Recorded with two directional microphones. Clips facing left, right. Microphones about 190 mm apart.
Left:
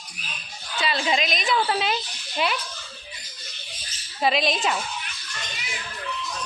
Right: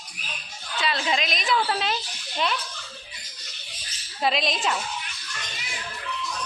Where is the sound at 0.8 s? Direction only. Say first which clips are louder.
Left 2 dB; centre (ahead or behind).